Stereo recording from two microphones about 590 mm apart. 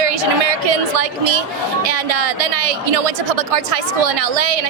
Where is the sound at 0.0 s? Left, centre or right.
Right.